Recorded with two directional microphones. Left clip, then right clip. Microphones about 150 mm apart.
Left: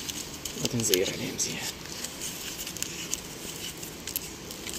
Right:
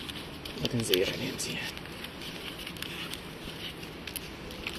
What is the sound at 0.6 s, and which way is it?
Speech, 15° left (ahead or behind).